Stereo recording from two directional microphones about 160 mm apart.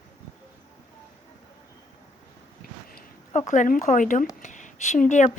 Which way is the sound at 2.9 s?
50° left (ahead or behind).